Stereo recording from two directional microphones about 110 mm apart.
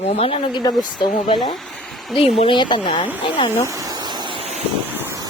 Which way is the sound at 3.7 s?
35° right (ahead or behind).